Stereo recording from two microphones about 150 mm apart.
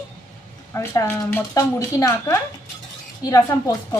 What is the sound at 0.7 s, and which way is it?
A woman's voice, 15° left (ahead or behind).